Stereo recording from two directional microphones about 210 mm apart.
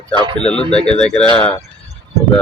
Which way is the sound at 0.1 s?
20° right (ahead or behind).